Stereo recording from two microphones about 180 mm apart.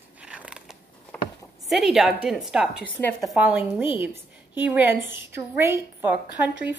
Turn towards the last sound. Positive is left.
turn(degrees=-10)  # may be behind; listen again after turning